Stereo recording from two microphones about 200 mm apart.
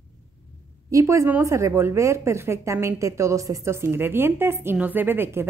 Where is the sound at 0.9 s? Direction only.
15° right (ahead or behind).